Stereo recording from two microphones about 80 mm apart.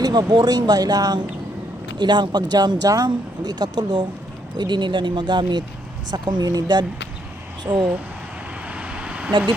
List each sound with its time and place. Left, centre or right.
0.0 s speech: right
2.0 s speech: right
8.6 s vehicle: centre